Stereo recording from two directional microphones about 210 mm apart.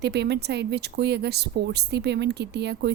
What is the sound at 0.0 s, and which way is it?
Speech, 55° right (ahead or behind).